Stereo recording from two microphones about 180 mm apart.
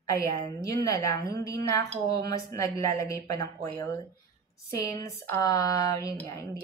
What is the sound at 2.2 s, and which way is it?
Speech, 20° left (ahead or behind).